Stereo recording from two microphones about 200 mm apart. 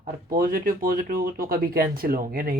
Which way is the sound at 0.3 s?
45° right (ahead or behind).